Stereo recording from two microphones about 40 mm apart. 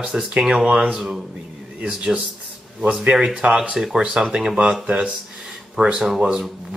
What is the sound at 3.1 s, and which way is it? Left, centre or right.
Speech, right.